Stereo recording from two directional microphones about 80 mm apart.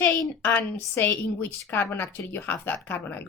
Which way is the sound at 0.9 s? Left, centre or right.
Left.